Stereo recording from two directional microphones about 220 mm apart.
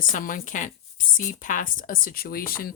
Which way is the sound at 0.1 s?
40° left (ahead or behind).